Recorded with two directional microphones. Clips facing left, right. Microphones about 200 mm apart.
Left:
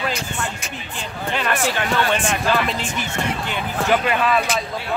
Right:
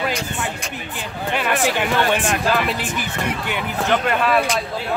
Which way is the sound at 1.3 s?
15° right (ahead or behind).